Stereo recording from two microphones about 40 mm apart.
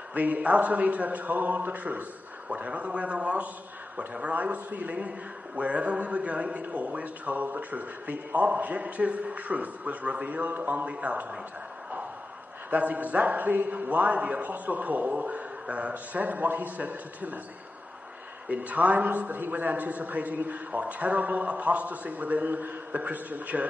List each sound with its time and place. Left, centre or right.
0.1 s a man's voice: right
2.5 s a man's voice: right
7.3 s a man's voice: right
10.9 s a man's voice: right
12.6 s a man's voice: right
15.9 s a man's voice: right
18.5 s a man's voice: right